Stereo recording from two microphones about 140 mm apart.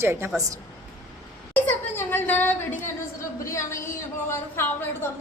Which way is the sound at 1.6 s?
15° left (ahead or behind).